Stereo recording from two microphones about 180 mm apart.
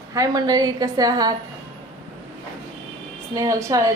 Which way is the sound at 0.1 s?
20° right (ahead or behind).